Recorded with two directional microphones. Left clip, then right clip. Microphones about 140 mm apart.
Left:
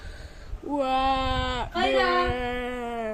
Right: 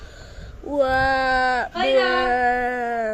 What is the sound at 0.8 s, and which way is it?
Speech, 35° left (ahead or behind).